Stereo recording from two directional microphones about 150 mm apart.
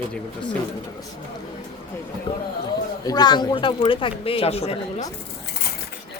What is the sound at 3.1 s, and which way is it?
Speech, 30° left (ahead or behind).